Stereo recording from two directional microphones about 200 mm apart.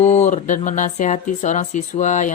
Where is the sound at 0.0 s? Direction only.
35° left (ahead or behind).